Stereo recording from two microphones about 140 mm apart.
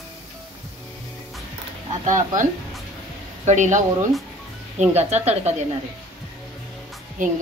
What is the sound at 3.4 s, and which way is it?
Speech, 60° right (ahead or behind).